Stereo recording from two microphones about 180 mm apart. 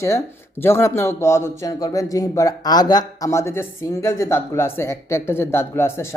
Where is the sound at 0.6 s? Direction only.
15° left (ahead or behind).